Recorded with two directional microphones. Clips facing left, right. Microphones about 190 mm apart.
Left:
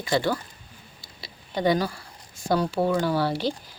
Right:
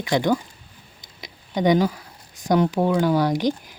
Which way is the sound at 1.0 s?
20° right (ahead or behind).